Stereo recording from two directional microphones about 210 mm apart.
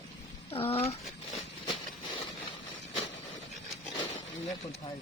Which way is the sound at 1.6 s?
25° left (ahead or behind).